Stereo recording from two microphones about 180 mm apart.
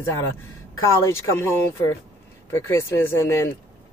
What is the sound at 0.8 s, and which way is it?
A woman's voice, 15° left (ahead or behind).